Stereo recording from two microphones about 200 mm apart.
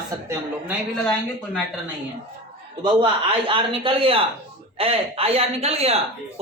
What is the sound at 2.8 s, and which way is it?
A man's voice, 25° right (ahead or behind).